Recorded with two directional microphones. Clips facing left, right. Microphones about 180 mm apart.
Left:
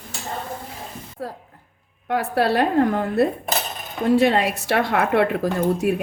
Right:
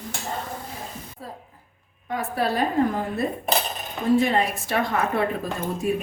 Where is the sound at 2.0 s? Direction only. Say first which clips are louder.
Left 5 dB; 75° left (ahead or behind).